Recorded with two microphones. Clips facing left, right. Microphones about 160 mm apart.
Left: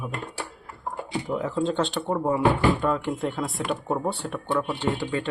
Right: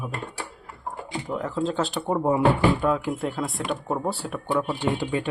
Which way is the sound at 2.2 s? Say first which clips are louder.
Right 2 dB; 15° right (ahead or behind).